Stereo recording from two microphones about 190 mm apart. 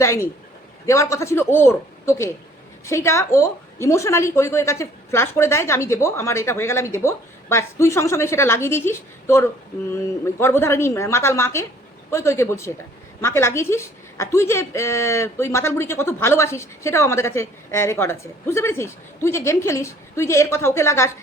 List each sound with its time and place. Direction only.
0.0 s a man's voice: 15° left (ahead or behind)